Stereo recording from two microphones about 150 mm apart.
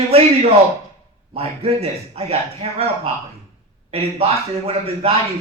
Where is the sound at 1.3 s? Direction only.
40° right (ahead or behind).